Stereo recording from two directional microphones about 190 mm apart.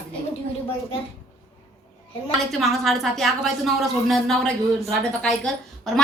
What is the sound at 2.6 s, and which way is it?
A woman's voice, centre (ahead or behind).